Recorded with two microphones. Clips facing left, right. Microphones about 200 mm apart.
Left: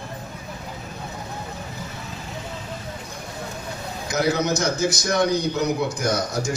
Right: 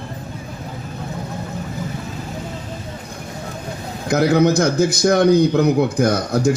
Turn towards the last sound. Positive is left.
turn(degrees=-55)  # may be behind; listen again after turning